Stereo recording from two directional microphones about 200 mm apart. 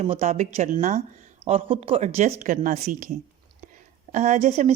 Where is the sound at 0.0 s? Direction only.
35° right (ahead or behind).